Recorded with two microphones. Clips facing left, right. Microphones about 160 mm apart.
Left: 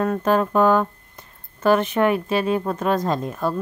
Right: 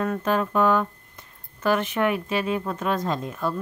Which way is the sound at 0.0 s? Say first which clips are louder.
Left 4 dB; 40° left (ahead or behind).